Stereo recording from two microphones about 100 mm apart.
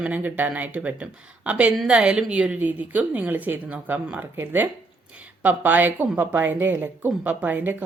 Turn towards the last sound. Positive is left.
turn(degrees=-20)  # may be behind; listen again after turning